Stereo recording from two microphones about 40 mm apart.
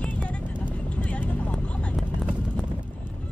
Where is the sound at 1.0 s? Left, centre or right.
Left.